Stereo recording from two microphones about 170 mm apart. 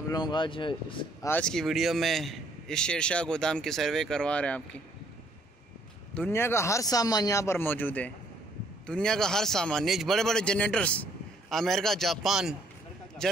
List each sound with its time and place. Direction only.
0.1 s speech: 25° left (ahead or behind)
1.2 s a man's voice: 10° left (ahead or behind)
6.1 s a man's voice: 10° left (ahead or behind)